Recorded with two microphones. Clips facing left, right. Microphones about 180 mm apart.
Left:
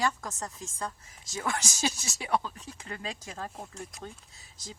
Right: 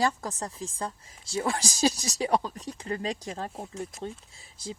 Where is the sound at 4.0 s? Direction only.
30° right (ahead or behind).